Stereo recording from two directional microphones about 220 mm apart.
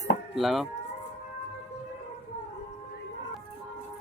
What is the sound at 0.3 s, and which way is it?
Speech, centre (ahead or behind).